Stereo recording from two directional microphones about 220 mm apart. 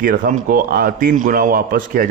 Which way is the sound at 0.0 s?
40° right (ahead or behind).